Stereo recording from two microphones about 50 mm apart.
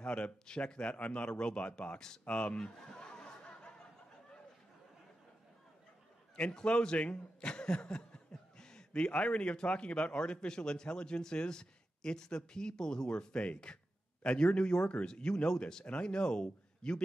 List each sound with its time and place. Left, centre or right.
0.0 s a man's voice: left
6.3 s a man's voice: centre